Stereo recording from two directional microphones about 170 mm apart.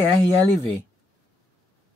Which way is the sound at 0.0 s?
20° right (ahead or behind).